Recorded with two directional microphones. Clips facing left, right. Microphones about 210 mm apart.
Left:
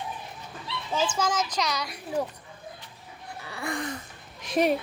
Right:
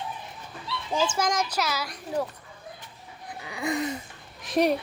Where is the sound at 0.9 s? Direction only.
10° right (ahead or behind).